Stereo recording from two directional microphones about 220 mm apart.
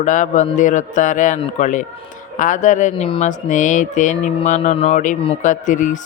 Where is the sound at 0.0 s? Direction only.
35° left (ahead or behind).